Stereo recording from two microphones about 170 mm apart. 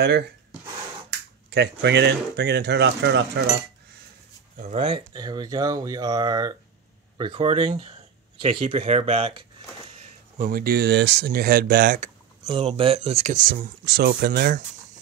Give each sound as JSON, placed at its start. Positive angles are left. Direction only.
{"t": 0.0, "sound": "speech", "side_deg": -75}
{"t": 1.5, "sound": "speech", "side_deg": -85}
{"t": 4.6, "sound": "speech", "side_deg": -45}
{"t": 5.1, "sound": "speech", "side_deg": -25}
{"t": 10.3, "sound": "speech", "side_deg": -55}
{"t": 12.5, "sound": "speech", "side_deg": -35}
{"t": 13.5, "sound": "speech", "side_deg": -65}